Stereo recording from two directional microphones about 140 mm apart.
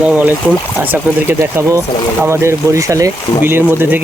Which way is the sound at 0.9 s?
15° right (ahead or behind).